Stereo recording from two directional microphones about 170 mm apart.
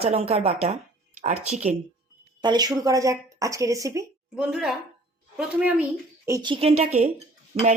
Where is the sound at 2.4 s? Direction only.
25° right (ahead or behind).